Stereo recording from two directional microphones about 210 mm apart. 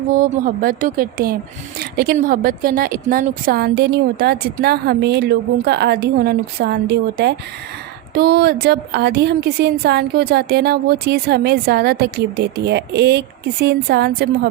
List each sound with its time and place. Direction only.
0.2 s a woman's voice: 40° right (ahead or behind)